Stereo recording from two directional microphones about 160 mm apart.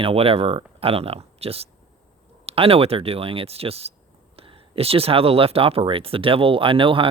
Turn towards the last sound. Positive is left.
turn(degrees=-35)  # may be behind; listen again after turning